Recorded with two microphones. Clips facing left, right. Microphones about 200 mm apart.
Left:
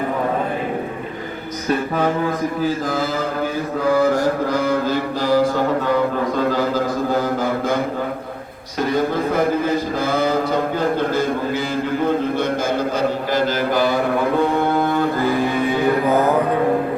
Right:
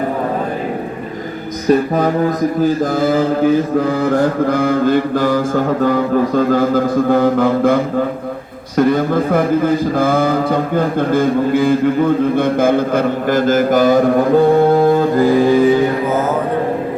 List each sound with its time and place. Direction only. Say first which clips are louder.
1.7 s a man's voice: right 6 dB; 40° right (ahead or behind); by 7.8 s 60° right (ahead or behind)
8.9 s a man's voice: right 1 dB; 55° right (ahead or behind); by 15.0 s 35° right (ahead or behind)